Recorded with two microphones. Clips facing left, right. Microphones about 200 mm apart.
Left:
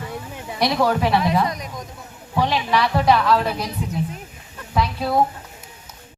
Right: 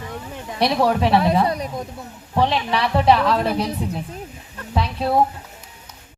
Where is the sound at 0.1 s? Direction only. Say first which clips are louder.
Even; 10° left (ahead or behind).